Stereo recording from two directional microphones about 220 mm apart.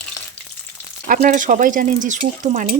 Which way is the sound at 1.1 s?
35° right (ahead or behind).